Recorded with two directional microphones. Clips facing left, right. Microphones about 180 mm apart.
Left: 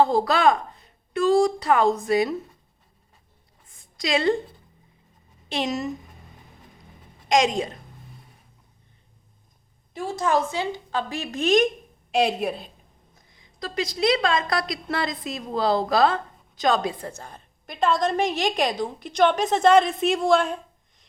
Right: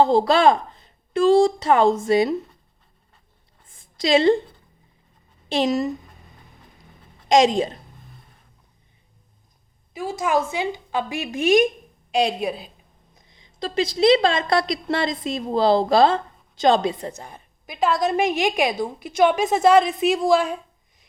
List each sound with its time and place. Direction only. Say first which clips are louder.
0.0 s a woman's voice: right 3 dB; 25° right (ahead or behind)
3.7 s a sound: right 6 dB; 30° right (ahead or behind)
5.5 s speech: right 6 dB; 30° right (ahead or behind)
7.3 s a woman's voice: right 4 dB; 30° right (ahead or behind)
9.9 s a woman's voice: right 1 dB; 10° right (ahead or behind)
12.1 s a woman's voice: right 1 dB; centre (ahead or behind)
13.1 s a woman's voice: right 5 dB; 25° right (ahead or behind)
17.7 s a woman's voice: right 1 dB; 5° right (ahead or behind)